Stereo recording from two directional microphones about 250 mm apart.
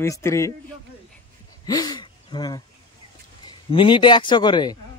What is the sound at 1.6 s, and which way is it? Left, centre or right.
A man's voice, centre.